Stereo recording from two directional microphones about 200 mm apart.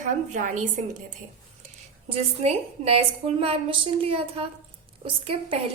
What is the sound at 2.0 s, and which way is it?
A woman's voice, 30° right (ahead or behind).